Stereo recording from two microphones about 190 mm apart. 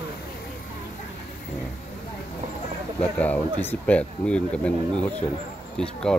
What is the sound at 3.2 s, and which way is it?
Speech, 10° left (ahead or behind).